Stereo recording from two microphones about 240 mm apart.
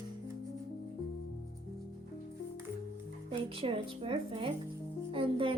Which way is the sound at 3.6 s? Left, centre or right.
Right.